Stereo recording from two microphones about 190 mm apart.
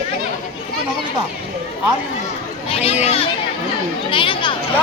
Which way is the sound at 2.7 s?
30° left (ahead or behind).